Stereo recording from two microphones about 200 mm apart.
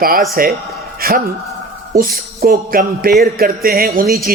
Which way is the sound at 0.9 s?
50° right (ahead or behind).